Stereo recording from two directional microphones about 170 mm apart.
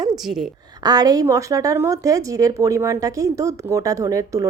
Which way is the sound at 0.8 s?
25° right (ahead or behind).